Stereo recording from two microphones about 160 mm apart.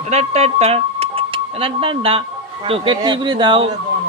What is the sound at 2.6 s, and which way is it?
Music, 35° right (ahead or behind).